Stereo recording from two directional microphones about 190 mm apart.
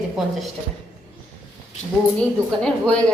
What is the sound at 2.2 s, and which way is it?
Speech, 5° left (ahead or behind).